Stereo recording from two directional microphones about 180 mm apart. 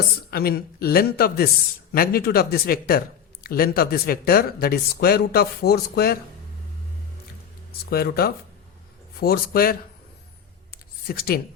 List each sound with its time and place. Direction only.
0.3 s speech: 60° left (ahead or behind)
7.9 s speech: 60° left (ahead or behind)
10.7 s a sound: 55° left (ahead or behind)